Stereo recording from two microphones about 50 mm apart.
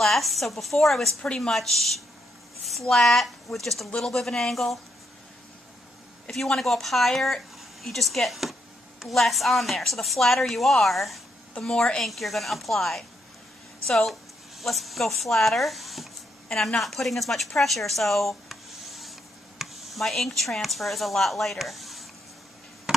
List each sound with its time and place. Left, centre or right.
0.0 s speech: centre
1.2 s speech: centre
6.3 s speech: centre
11.6 s speech: centre
12.0 s speech: centre
17.6 s a sound: centre
19.6 s speech: centre
22.9 s a sound: centre